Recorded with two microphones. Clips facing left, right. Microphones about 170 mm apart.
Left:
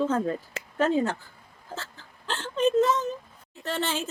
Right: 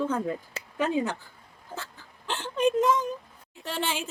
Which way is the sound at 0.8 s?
15° right (ahead or behind).